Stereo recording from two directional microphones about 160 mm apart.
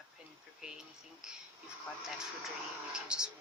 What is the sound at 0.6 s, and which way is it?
Speech, 5° right (ahead or behind).